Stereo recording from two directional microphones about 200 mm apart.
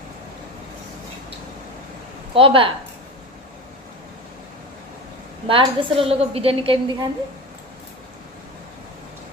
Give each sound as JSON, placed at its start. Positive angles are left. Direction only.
{"t": 2.3, "sound": "a woman's voice", "side_deg": -25}
{"t": 5.5, "sound": "a woman's voice", "side_deg": -25}